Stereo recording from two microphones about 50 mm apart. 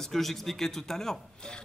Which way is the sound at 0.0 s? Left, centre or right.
Centre.